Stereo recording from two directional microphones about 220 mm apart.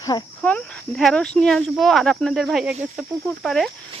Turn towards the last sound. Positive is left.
turn(degrees=0)  # may be behind; listen again after turning